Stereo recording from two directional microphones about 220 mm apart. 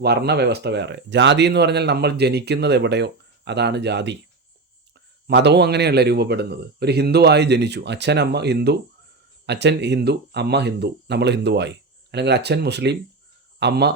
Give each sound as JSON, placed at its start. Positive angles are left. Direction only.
{"t": 0.0, "sound": "speech", "side_deg": -50}